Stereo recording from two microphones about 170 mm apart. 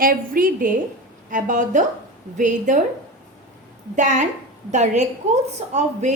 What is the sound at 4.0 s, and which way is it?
A woman's voice, 45° right (ahead or behind).